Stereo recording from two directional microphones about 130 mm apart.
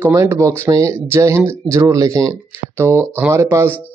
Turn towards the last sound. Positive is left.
turn(degrees=-20)  # may be behind; listen again after turning